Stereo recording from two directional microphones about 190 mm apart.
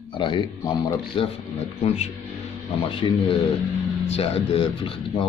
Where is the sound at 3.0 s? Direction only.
25° left (ahead or behind).